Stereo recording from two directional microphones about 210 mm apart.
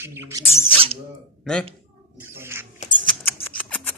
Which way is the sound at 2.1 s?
10° right (ahead or behind).